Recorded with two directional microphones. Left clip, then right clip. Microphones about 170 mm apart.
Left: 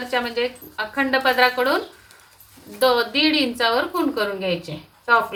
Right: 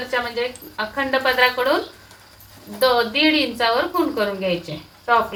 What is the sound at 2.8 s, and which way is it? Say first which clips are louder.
A woman's voice: right 1 dB; 25° left (ahead or behind).